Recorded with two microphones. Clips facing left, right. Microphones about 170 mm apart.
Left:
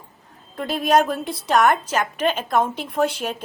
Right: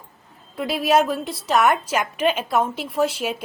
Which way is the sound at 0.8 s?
5° right (ahead or behind).